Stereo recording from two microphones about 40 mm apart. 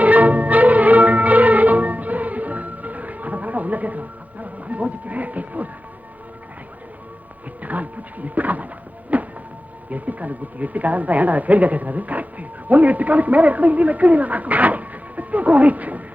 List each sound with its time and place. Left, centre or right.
0.0 s music: right
7.6 s a sound: right
9.9 s speech: right